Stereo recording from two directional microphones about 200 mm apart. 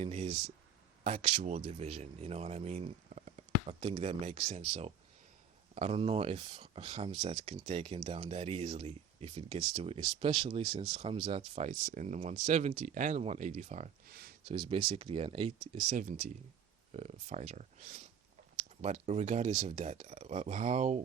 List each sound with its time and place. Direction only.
0.0 s speech: 30° right (ahead or behind)
14.1 s speech: 50° right (ahead or behind)
14.4 s speech: 25° right (ahead or behind)